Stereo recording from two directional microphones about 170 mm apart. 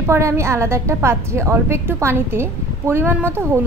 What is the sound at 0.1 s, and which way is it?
A woman's voice, 15° right (ahead or behind).